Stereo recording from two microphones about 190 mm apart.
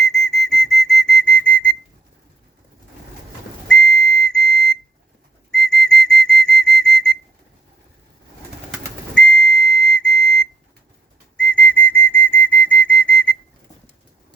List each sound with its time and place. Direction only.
0.1 s whistle: centre (ahead or behind)
3.7 s whistle: 5° left (ahead or behind)
9.1 s whistle: 5° left (ahead or behind)